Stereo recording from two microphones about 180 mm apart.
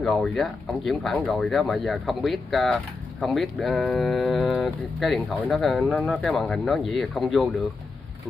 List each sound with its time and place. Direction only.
0.0 s speech: centre (ahead or behind)